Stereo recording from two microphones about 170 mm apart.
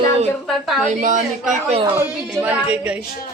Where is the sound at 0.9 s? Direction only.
45° right (ahead or behind).